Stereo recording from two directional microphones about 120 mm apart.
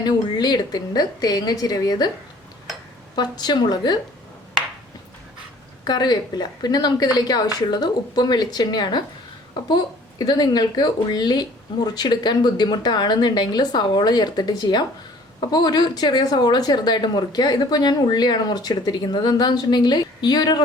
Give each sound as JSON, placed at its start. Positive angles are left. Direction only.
{"t": 0.0, "sound": "speech", "side_deg": 35}
{"t": 3.2, "sound": "speech", "side_deg": 35}
{"t": 5.8, "sound": "speech", "side_deg": 35}
{"t": 10.2, "sound": "speech", "side_deg": 35}